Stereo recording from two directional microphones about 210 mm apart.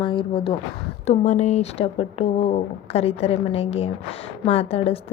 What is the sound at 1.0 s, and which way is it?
Speech, 35° left (ahead or behind).